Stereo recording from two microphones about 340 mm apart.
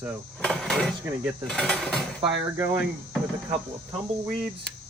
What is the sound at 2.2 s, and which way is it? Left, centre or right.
Speech, centre.